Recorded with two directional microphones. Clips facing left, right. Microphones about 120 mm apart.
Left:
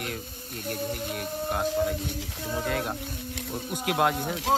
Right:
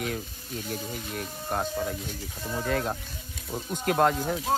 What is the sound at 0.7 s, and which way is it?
Speech, centre (ahead or behind).